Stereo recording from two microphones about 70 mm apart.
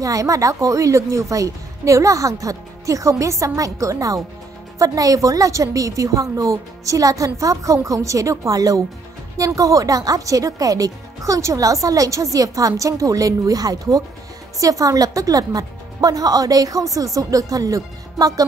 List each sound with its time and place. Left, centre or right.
0.0 s a woman's voice: right